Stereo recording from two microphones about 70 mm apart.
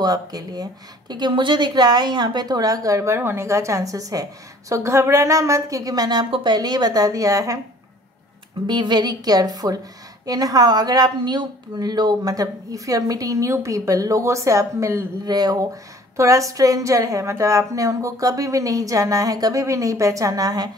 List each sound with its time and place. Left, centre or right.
0.0 s speech: right
3.2 s speech: right
8.6 s a woman's voice: right
15.2 s a woman's voice: right
19.6 s a woman's voice: right